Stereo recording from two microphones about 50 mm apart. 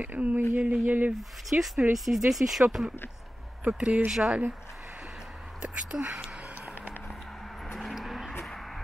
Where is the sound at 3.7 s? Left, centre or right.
Right.